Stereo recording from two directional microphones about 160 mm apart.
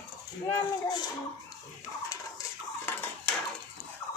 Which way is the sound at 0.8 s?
25° left (ahead or behind).